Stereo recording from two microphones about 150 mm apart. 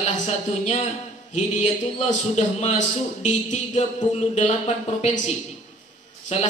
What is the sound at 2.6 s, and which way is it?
A man's voice, 50° left (ahead or behind).